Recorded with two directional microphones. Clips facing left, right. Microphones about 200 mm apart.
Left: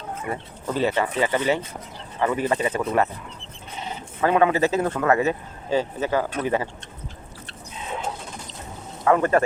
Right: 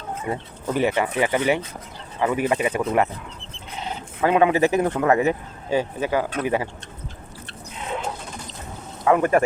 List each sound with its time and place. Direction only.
0.3 s speech: 15° right (ahead or behind)
4.2 s speech: 15° right (ahead or behind)
9.0 s speech: 15° right (ahead or behind)